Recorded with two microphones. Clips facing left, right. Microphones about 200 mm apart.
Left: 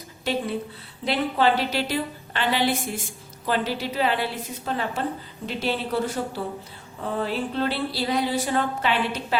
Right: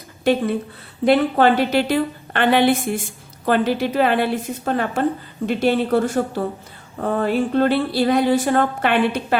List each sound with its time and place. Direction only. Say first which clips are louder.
1.0 s a woman's voice: right 7 dB; 50° right (ahead or behind)